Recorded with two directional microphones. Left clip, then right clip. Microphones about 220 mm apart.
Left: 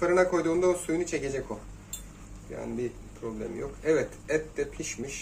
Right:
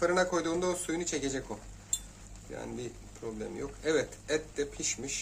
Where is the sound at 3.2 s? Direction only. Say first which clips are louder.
Left 3 dB; 40° right (ahead or behind).